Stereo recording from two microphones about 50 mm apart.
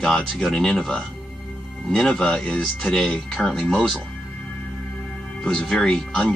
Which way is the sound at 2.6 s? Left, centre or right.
Centre.